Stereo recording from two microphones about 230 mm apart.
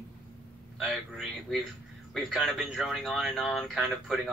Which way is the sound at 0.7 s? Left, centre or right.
Centre.